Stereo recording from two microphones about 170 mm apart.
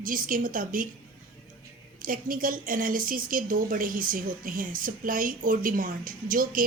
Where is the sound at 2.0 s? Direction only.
55° right (ahead or behind).